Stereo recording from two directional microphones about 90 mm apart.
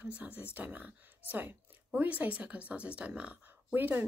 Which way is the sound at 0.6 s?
15° right (ahead or behind).